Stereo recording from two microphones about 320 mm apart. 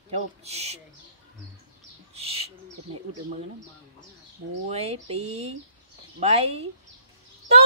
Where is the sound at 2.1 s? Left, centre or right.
Centre.